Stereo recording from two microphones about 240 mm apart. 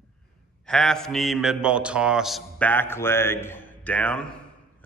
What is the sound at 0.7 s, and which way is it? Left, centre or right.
A man's voice, centre.